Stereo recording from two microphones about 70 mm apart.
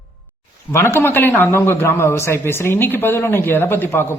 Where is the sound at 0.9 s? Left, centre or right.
Left.